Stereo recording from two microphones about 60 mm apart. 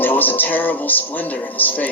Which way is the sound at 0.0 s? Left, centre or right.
Left.